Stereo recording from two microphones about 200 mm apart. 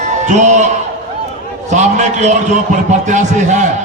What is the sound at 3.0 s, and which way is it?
Speech, 35° right (ahead or behind).